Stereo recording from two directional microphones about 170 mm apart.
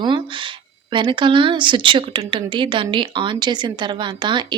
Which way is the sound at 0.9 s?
30° right (ahead or behind).